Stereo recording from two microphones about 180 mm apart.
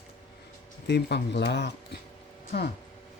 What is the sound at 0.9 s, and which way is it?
Speech, 70° left (ahead or behind).